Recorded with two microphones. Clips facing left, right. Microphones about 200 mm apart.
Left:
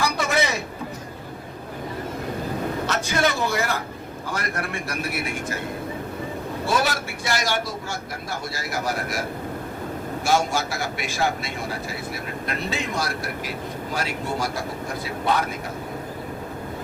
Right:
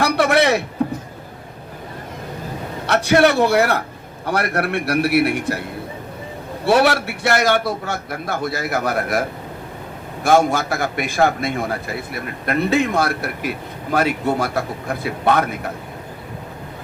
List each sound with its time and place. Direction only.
0.0 s a sound: 65° right (ahead or behind)
2.8 s a man's voice: 65° right (ahead or behind)
6.7 s a man's voice: 65° right (ahead or behind)
10.2 s a man's voice: 55° right (ahead or behind)